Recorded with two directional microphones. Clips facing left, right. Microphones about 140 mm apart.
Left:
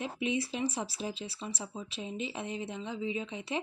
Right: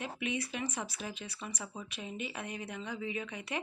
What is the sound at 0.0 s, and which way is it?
Speech, 30° left (ahead or behind).